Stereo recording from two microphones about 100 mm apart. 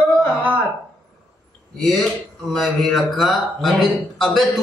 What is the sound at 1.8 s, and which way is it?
A man's voice, centre (ahead or behind).